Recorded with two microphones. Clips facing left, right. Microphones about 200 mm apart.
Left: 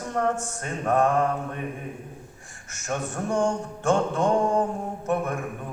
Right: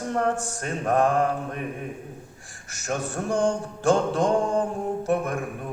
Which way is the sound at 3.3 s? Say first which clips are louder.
Right 1 dB; 35° right (ahead or behind).